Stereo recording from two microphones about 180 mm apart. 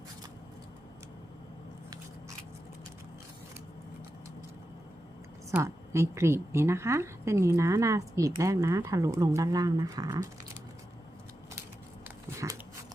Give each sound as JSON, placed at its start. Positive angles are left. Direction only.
{"t": 5.5, "sound": "a woman's voice", "side_deg": -15}
{"t": 12.0, "sound": "dog", "side_deg": -15}